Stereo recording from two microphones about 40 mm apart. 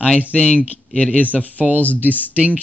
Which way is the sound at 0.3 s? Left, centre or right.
Left.